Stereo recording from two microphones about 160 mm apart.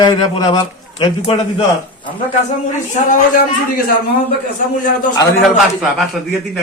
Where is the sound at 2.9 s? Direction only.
55° left (ahead or behind).